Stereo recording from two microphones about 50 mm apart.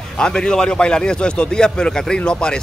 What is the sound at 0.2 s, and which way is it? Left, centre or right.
Speech, centre.